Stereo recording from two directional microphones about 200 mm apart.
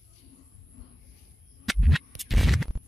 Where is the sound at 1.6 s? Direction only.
Centre (ahead or behind).